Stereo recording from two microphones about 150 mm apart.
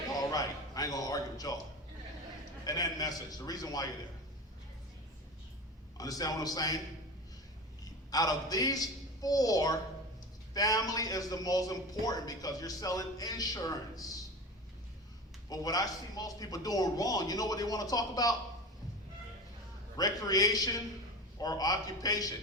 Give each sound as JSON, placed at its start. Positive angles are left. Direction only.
{"t": 0.2, "sound": "a sound", "side_deg": 25}
{"t": 2.6, "sound": "a man's voice", "side_deg": 25}
{"t": 6.0, "sound": "a man's voice", "side_deg": 25}
{"t": 8.1, "sound": "a man's voice", "side_deg": 25}
{"t": 15.4, "sound": "a man's voice", "side_deg": 25}
{"t": 20.0, "sound": "a man's voice", "side_deg": 25}